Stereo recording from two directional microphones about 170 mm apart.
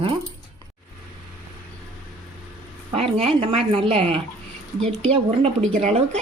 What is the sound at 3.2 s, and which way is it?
A woman's voice, 35° right (ahead or behind).